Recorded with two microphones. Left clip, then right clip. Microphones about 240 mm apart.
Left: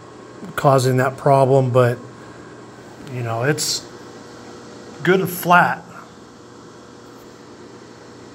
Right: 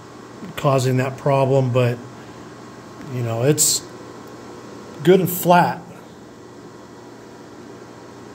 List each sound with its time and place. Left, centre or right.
0.6 s speech: centre
3.2 s speech: centre
5.0 s speech: right